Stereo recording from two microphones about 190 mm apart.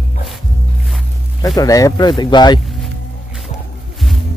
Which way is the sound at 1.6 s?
15° left (ahead or behind).